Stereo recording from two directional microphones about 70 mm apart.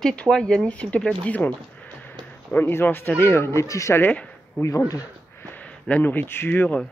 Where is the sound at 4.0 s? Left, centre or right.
Left.